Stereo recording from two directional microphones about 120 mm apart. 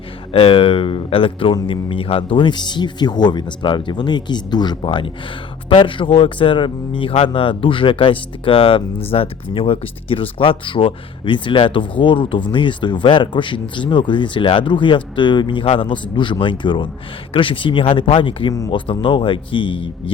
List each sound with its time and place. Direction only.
0.3 s speech: 50° left (ahead or behind)